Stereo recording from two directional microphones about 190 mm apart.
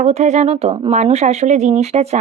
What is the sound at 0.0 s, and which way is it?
Speech, 35° right (ahead or behind).